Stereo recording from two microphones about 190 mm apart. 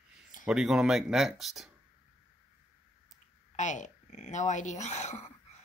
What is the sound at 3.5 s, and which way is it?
Speech, 40° left (ahead or behind).